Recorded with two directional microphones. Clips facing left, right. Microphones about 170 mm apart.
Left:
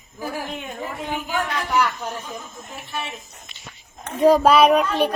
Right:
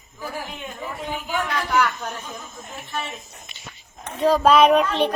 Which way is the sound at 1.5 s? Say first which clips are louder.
Right 1 dB; 10° left (ahead or behind).